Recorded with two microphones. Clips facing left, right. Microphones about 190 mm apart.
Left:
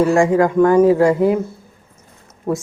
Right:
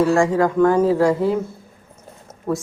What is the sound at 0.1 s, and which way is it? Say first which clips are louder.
Speech: left 3 dB; 15° left (ahead or behind).